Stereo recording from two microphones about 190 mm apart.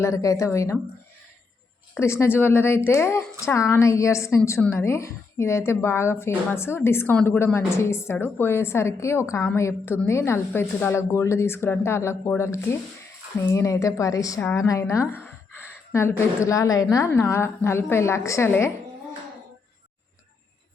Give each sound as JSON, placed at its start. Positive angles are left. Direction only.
{"t": 0.0, "sound": "a woman's voice", "side_deg": 15}
{"t": 2.0, "sound": "a woman's voice", "side_deg": 15}